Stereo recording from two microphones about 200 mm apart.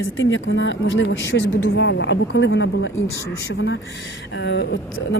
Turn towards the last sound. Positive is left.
turn(degrees=60)  # may be behind; listen again after turning